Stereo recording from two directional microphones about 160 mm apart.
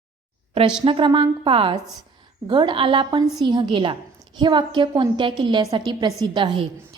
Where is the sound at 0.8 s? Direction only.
30° right (ahead or behind).